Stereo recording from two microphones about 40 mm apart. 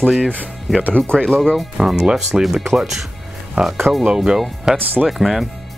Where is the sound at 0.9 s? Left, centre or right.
Left.